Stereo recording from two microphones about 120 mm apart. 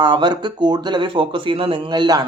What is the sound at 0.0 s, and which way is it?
Speech, 40° right (ahead or behind).